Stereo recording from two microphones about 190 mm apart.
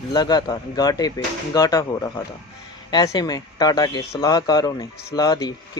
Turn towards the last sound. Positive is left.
turn(degrees=20)  # may be behind; listen again after turning